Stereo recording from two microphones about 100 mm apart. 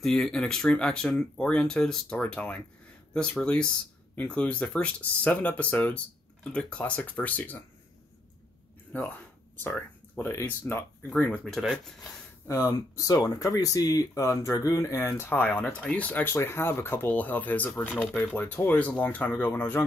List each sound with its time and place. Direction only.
0.0 s speech: 5° left (ahead or behind)
8.9 s speech: 15° left (ahead or behind)
12.4 s speech: 35° left (ahead or behind); by 19.8 s 20° left (ahead or behind)